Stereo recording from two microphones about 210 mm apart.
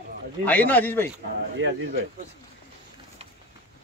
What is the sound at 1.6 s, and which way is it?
Speech, 60° right (ahead or behind).